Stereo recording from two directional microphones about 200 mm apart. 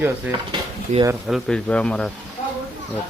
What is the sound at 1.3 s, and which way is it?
Speech, 5° left (ahead or behind).